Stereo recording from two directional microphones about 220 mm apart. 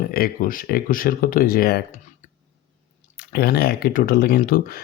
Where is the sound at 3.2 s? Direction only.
45° left (ahead or behind).